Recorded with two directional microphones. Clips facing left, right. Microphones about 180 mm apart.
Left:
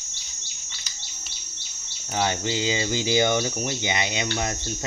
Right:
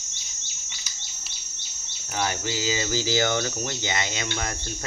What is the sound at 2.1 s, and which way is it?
Speech, 25° left (ahead or behind).